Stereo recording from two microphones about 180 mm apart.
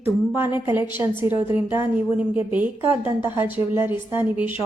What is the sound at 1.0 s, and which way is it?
Speech, 10° right (ahead or behind).